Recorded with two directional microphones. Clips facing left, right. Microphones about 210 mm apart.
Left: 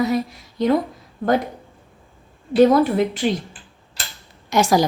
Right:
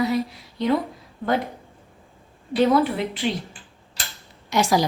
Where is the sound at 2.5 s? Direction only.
45° left (ahead or behind).